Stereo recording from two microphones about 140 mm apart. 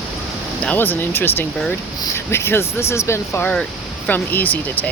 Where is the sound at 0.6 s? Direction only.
10° left (ahead or behind).